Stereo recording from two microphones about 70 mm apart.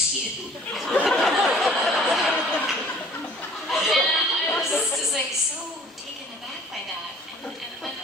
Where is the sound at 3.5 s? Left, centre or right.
Centre.